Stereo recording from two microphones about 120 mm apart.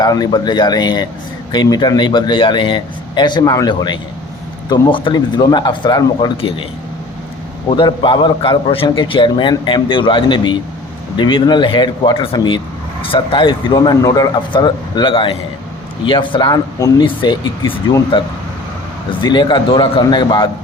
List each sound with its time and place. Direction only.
0.0 s speech: 35° left (ahead or behind)
6.3 s a man's voice: 50° left (ahead or behind)
7.8 s a man's voice: 40° left (ahead or behind)
19.2 s speech: 40° left (ahead or behind)